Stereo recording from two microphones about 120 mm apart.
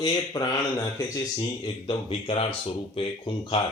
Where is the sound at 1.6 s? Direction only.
45° left (ahead or behind).